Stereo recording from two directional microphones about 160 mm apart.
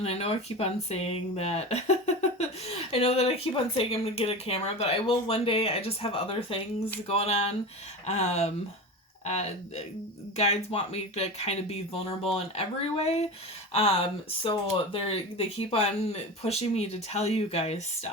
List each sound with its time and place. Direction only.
0.0 s speech: 40° left (ahead or behind)
14.4 s speech: 35° left (ahead or behind)